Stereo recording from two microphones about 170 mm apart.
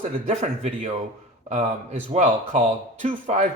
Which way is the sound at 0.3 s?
40° right (ahead or behind).